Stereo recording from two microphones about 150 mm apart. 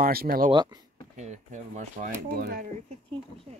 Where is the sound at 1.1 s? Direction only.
50° right (ahead or behind).